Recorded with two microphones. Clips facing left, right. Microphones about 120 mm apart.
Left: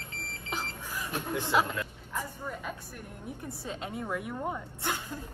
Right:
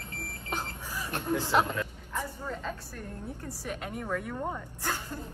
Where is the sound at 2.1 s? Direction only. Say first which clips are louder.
Right 1 dB; 10° left (ahead or behind).